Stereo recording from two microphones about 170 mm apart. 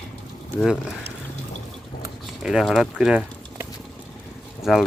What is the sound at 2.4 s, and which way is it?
Speech, centre (ahead or behind).